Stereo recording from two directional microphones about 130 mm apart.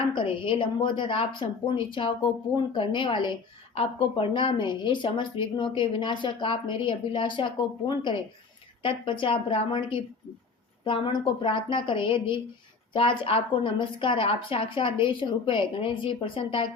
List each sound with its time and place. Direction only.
0.1 s speech: 40° left (ahead or behind)